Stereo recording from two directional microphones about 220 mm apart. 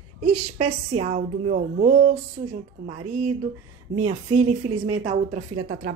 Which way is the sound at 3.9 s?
30° right (ahead or behind).